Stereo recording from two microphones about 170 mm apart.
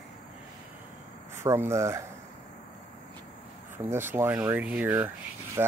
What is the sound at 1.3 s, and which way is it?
Speech, 15° right (ahead or behind).